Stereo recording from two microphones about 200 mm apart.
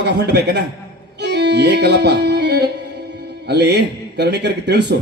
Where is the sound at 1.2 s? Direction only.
60° right (ahead or behind).